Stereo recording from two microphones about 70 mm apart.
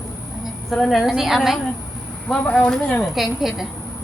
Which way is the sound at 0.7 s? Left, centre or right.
Centre.